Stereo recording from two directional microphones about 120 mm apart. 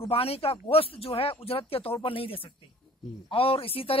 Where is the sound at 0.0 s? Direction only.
55° left (ahead or behind).